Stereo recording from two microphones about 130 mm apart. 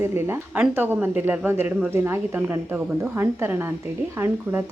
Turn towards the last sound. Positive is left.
turn(degrees=-20)  # may be behind; listen again after turning